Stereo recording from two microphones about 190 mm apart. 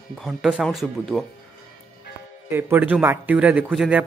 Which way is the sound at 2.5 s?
10° right (ahead or behind).